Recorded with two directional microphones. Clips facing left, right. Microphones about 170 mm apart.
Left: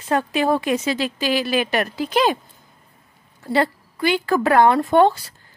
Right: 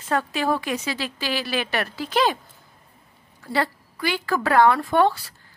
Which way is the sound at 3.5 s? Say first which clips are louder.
Left 5 dB; 20° left (ahead or behind).